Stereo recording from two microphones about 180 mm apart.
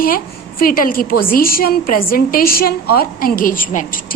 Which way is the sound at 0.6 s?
55° left (ahead or behind).